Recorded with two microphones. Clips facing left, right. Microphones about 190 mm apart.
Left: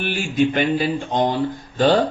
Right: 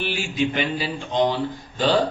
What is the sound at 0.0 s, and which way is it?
A man's voice, 50° left (ahead or behind).